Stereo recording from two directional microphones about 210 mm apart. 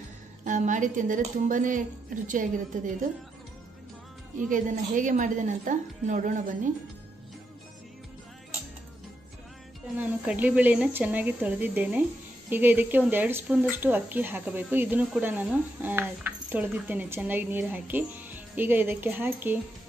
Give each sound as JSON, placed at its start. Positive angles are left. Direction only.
{"t": 0.5, "sound": "a woman's voice", "side_deg": -35}
{"t": 4.5, "sound": "a woman's voice", "side_deg": -40}
{"t": 9.9, "sound": "speech", "side_deg": -5}